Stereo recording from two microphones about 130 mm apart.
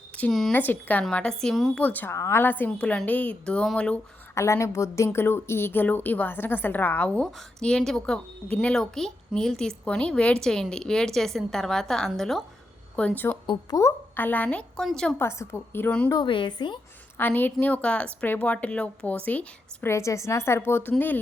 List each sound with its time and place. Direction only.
0.2 s a woman's voice: 5° left (ahead or behind)
0.5 s a woman's voice: 15° left (ahead or behind)
1.8 s a woman's voice: 15° left (ahead or behind)
4.4 s a woman's voice: 20° left (ahead or behind)
13.5 s a woman's voice: 25° left (ahead or behind); by 15.1 s 5° left (ahead or behind)
15.2 s a woman's voice: 20° left (ahead or behind)
16.0 s a woman's voice: 35° left (ahead or behind)
17.2 s a woman's voice: 15° left (ahead or behind)